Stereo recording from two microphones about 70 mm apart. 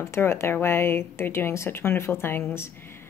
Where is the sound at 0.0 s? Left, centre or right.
Left.